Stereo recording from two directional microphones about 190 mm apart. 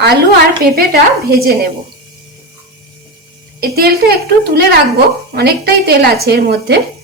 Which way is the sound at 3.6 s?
55° right (ahead or behind).